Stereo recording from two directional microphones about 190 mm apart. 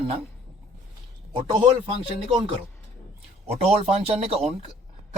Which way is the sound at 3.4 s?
30° right (ahead or behind).